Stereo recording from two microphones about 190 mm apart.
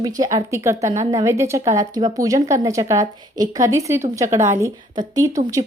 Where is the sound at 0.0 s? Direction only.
20° right (ahead or behind).